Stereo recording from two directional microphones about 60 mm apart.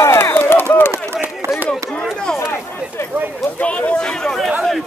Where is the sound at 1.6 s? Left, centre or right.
Centre.